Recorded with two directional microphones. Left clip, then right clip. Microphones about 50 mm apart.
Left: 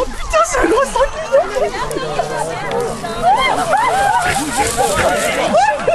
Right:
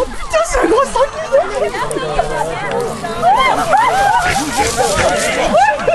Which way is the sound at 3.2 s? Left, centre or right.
Right.